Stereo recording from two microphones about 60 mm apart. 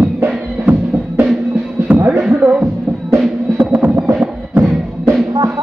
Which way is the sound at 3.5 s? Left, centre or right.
Right.